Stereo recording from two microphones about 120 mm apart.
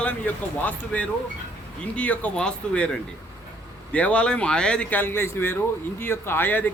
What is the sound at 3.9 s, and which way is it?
Speech, 10° left (ahead or behind).